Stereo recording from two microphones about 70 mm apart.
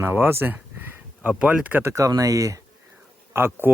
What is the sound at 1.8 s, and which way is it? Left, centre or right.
Speech, right.